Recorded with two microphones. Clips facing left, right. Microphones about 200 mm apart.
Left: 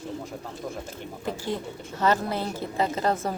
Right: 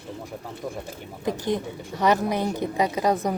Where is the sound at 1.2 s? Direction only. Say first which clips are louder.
Right 5 dB; 15° right (ahead or behind).